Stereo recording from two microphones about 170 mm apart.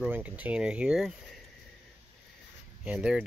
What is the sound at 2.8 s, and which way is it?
Speech, 5° right (ahead or behind).